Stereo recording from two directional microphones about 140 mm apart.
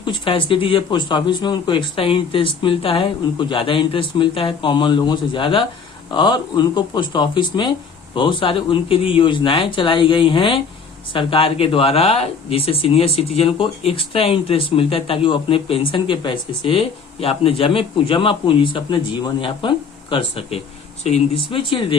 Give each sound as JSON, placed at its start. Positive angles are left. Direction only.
{"t": 0.0, "sound": "speech", "side_deg": 35}